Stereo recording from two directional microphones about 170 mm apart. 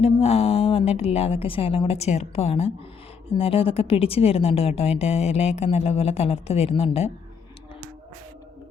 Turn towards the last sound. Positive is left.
turn(degrees=35)  # may be behind; listen again after turning